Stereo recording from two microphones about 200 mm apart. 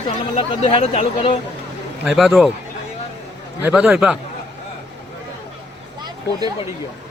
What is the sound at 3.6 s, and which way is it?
Speech, 5° right (ahead or behind).